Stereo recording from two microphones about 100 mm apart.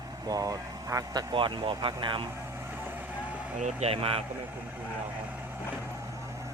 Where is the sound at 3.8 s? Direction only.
75° right (ahead or behind).